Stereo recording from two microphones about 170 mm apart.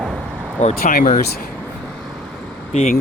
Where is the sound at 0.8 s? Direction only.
60° left (ahead or behind).